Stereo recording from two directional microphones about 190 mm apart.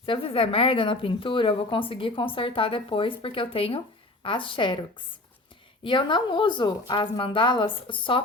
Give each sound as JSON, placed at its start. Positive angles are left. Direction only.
{"t": 0.0, "sound": "a woman's voice", "side_deg": 30}